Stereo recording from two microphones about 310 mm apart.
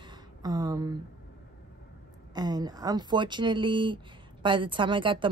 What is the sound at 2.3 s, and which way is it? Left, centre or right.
Speech, centre.